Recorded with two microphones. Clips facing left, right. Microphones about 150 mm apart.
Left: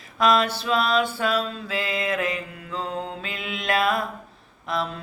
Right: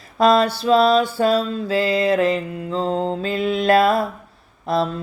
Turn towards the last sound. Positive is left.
turn(degrees=-35)  # may be behind; listen again after turning